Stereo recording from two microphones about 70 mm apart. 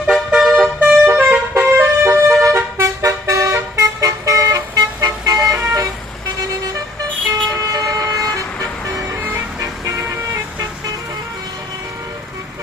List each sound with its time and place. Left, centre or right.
0.3 s vehicle: centre
0.8 s vehicle horn: right
2.4 s vehicle: right
3.4 s vehicle: right
4.0 s vehicle: right
5.4 s vehicle: right
7.4 s vehicle: right
9.6 s vehicle: right